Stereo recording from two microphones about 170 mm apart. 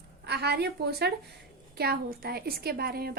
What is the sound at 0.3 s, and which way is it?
A woman's voice, 70° right (ahead or behind).